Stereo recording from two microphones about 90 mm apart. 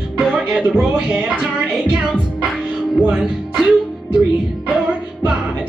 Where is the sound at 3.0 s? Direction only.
10° right (ahead or behind).